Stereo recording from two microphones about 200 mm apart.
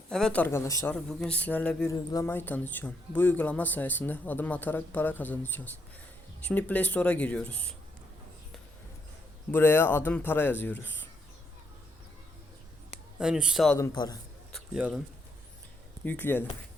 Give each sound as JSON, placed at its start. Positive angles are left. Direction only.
{"t": 0.1, "sound": "speech", "side_deg": 5}
{"t": 9.5, "sound": "speech", "side_deg": 10}
{"t": 13.1, "sound": "speech", "side_deg": -5}
{"t": 13.7, "sound": "a man's voice", "side_deg": 20}
{"t": 14.5, "sound": "speech", "side_deg": -5}
{"t": 16.0, "sound": "speech", "side_deg": 10}